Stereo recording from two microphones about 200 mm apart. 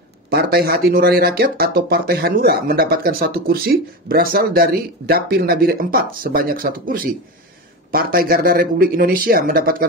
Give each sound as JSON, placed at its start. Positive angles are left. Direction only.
{"t": 0.3, "sound": "speech", "side_deg": -50}